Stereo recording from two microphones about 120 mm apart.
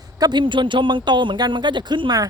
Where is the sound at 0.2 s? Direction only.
40° right (ahead or behind).